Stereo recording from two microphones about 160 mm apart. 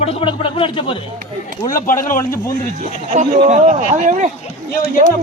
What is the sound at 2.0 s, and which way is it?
Speech, 55° left (ahead or behind).